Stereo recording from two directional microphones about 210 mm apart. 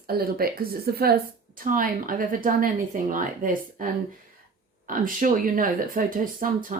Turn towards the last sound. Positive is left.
turn(degrees=-40)  # may be behind; listen again after turning